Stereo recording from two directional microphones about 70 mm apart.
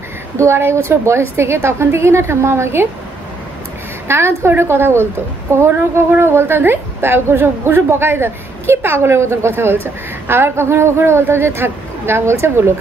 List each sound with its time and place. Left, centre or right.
0.4 s a woman's voice: right
4.1 s a woman's voice: right